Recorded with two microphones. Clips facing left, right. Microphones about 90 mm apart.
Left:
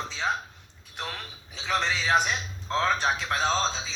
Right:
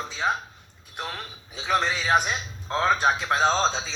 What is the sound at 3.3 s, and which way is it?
Speech, 25° right (ahead or behind).